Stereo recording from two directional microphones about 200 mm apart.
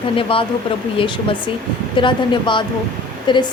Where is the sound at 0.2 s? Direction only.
25° left (ahead or behind).